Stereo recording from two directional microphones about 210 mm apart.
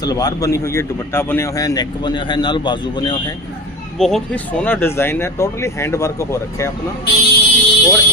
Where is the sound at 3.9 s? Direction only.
Centre (ahead or behind).